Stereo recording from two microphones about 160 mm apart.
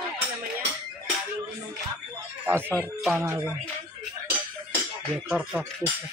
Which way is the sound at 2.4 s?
15° right (ahead or behind).